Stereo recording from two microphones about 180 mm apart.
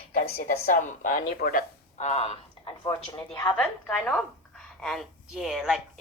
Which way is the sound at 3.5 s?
5° left (ahead or behind).